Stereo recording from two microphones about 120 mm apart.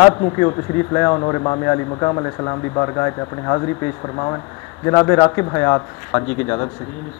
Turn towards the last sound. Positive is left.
turn(degrees=20)  # may be behind; listen again after turning